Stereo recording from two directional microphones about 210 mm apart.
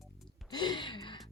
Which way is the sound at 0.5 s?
20° left (ahead or behind).